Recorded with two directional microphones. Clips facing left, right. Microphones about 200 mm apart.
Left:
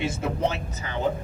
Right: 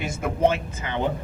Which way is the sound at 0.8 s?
40° left (ahead or behind).